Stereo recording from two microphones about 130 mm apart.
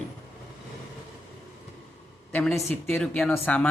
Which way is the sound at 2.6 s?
20° left (ahead or behind).